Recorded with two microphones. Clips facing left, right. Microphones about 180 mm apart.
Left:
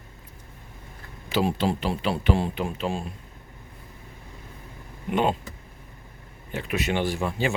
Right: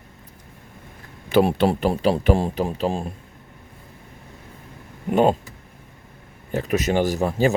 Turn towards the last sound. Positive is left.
turn(degrees=-40)  # may be behind; listen again after turning